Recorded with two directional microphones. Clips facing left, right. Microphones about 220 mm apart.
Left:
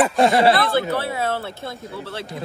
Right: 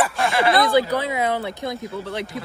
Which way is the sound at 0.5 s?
15° right (ahead or behind).